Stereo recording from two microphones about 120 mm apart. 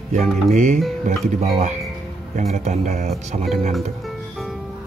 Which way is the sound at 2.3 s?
80° right.